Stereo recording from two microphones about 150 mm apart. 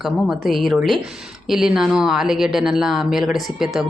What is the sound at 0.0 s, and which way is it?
Speech, centre (ahead or behind).